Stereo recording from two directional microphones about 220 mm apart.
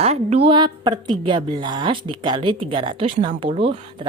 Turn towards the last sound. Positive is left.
turn(degrees=-25)  # may be behind; listen again after turning